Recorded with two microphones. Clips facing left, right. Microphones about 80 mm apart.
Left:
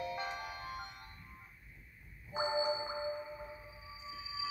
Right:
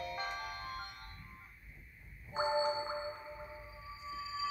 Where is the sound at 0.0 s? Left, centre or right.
Centre.